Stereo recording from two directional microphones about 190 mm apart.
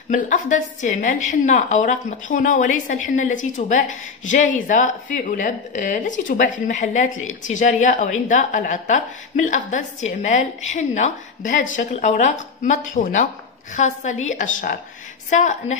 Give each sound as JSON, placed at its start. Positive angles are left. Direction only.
{"t": 0.1, "sound": "a woman's voice", "side_deg": 40}